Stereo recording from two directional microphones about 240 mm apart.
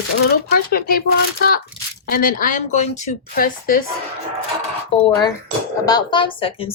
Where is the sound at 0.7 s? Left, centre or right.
Left.